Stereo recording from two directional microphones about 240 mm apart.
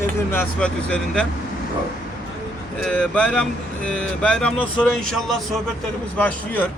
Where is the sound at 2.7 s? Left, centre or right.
Centre.